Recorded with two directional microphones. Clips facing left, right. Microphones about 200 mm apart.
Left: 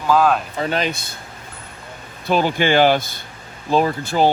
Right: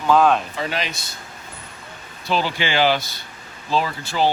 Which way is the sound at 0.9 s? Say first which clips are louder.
Left 8 dB; 55° left (ahead or behind).